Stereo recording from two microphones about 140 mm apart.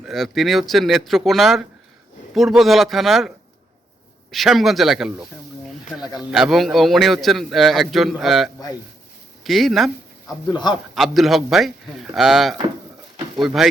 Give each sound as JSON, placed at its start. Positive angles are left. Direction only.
{"t": 0.0, "sound": "a man's voice", "side_deg": 0}
{"t": 6.0, "sound": "speech", "side_deg": 30}
{"t": 6.3, "sound": "a man's voice", "side_deg": 0}